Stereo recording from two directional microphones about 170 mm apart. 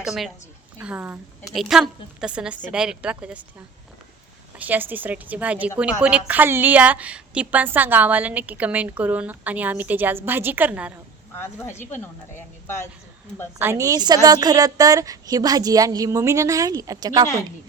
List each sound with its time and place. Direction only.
0.0 s a woman's voice: centre (ahead or behind)
4.5 s a woman's voice: 10° right (ahead or behind)
11.3 s a woman's voice: 15° left (ahead or behind)
13.6 s a woman's voice: 15° right (ahead or behind)